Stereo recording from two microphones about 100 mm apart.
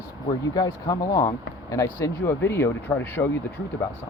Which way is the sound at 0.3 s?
40° left (ahead or behind).